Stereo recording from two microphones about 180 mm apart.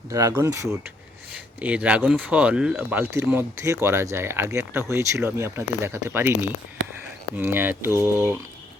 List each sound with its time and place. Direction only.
0.1 s speech: 20° right (ahead or behind)